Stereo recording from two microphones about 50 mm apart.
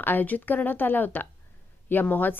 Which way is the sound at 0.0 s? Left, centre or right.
Left.